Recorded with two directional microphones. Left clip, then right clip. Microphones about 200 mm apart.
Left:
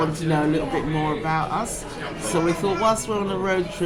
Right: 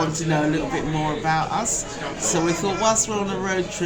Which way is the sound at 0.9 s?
10° right (ahead or behind).